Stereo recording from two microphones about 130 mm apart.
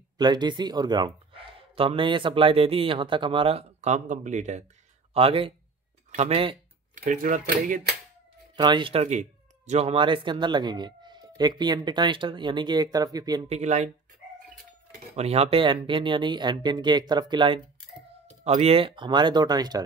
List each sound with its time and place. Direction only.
0.2 s speech: 35° right (ahead or behind); by 4.6 s 65° right (ahead or behind)
5.1 s speech: 45° right (ahead or behind)
7.0 s speech: 90° right
8.5 s speech: 35° right (ahead or behind)
9.0 s speech: 65° right (ahead or behind); by 13.5 s 30° right (ahead or behind)
13.5 s speech: 60° right (ahead or behind)
15.1 s speech: 55° right (ahead or behind); by 17.6 s 35° right (ahead or behind)
18.4 s speech: 55° right (ahead or behind); by 19.8 s 30° right (ahead or behind)